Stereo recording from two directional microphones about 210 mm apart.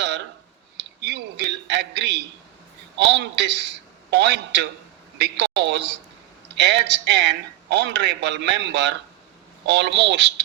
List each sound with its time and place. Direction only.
1.0 s a man's voice: 55° right (ahead or behind)